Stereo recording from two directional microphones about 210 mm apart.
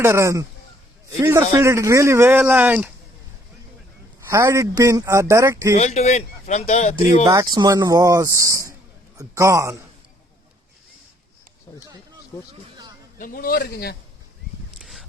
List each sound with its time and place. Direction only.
0.0 s speech: 15° right (ahead or behind)
4.3 s speech: 10° right (ahead or behind)
5.7 s speech: 35° left (ahead or behind)
7.3 s a man's voice: 20° right (ahead or behind)
13.1 s a man's voice: 40° left (ahead or behind)